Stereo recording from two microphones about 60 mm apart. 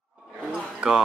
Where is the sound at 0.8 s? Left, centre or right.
Centre.